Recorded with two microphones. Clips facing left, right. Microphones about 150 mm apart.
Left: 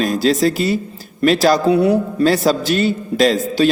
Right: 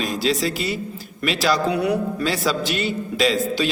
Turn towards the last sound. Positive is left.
turn(degrees=40)  # may be behind; listen again after turning